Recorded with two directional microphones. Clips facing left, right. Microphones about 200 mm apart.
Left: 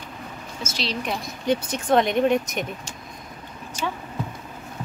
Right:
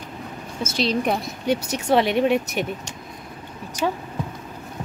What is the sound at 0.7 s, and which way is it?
Speech, 55° right (ahead or behind).